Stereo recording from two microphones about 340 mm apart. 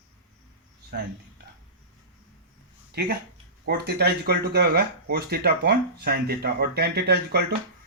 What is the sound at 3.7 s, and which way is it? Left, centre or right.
Speech, right.